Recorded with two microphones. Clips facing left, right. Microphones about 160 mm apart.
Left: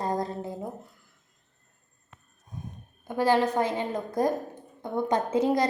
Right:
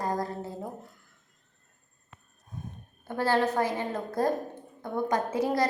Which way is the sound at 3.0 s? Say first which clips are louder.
Left 3 dB; 15° left (ahead or behind).